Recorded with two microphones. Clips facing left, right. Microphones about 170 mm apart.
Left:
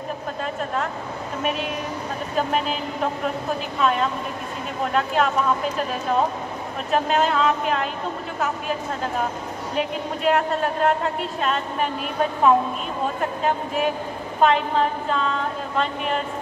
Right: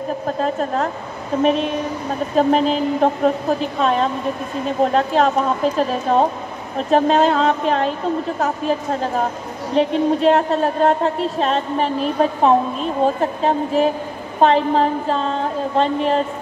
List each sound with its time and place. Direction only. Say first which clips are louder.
0.4 s a woman's voice: right 6 dB; 40° right (ahead or behind)